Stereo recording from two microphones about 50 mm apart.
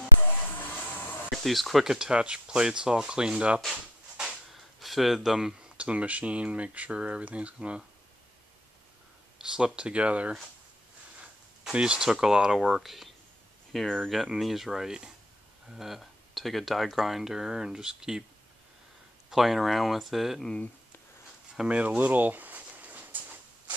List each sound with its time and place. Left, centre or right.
0.6 s music: left
1.3 s speech: centre
2.0 s speech: centre
4.6 s a sound: centre
5.8 s speech: right
9.4 s speech: centre
11.7 s speech: centre
19.3 s speech: centre
21.6 s a sound: right